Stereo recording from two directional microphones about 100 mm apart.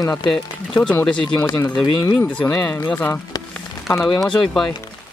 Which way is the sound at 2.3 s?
5° left (ahead or behind).